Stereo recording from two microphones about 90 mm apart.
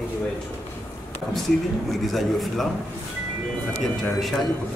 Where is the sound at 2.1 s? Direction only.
Centre (ahead or behind).